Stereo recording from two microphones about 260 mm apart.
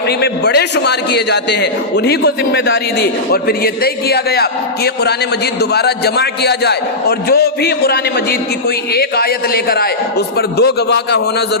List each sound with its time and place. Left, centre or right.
0.2 s a man's voice: left